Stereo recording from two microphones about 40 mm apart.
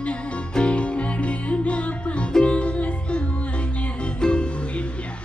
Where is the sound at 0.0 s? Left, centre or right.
Left.